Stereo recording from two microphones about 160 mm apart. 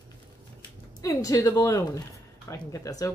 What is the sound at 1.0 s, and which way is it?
Speech, 20° left (ahead or behind).